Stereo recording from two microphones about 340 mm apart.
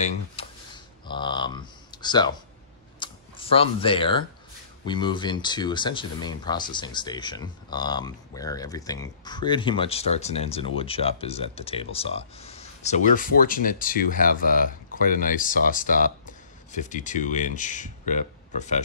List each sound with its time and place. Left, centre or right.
0.4 s a sound: centre
1.0 s speech: centre
3.0 s computer keyboard: centre
4.8 s speech: centre